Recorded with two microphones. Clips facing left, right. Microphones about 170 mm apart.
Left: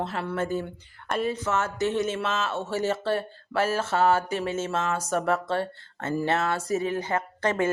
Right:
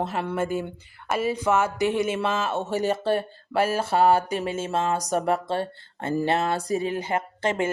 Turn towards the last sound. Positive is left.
turn(degrees=-25)  # may be behind; listen again after turning